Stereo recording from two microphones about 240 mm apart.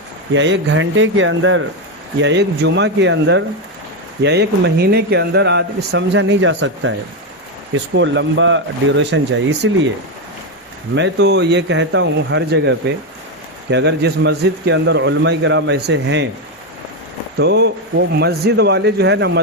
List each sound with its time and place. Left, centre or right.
0.3 s speech: right
10.9 s speech: right
17.3 s speech: right